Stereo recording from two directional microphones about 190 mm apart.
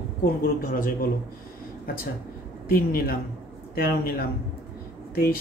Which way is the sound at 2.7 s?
50° left (ahead or behind).